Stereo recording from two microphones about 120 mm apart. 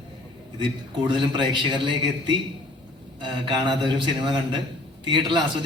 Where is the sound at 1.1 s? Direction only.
40° right (ahead or behind).